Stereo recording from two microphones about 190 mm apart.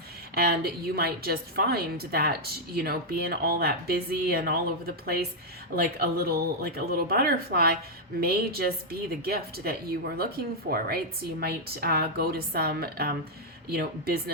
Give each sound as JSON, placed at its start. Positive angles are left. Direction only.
{"t": 0.3, "sound": "a woman's voice", "side_deg": -55}